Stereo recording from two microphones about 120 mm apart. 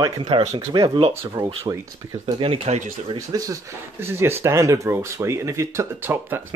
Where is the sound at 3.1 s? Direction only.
30° right (ahead or behind).